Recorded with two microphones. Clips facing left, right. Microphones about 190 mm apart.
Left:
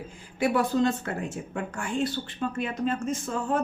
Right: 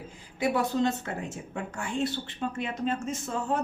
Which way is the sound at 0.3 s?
20° right (ahead or behind).